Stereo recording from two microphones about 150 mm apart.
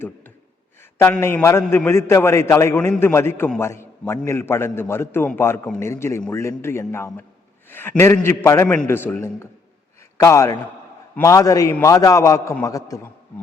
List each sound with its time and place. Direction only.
0.9 s a man's voice: 15° left (ahead or behind)